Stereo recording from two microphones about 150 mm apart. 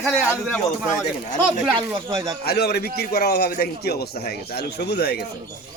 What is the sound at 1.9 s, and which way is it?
Speech, 20° right (ahead or behind).